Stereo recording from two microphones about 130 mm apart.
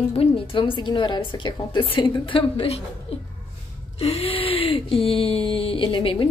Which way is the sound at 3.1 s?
50° left (ahead or behind).